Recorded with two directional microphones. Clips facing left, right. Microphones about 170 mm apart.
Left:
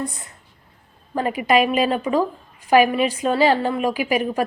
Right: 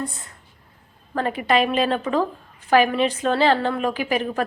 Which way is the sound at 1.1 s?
10° left (ahead or behind).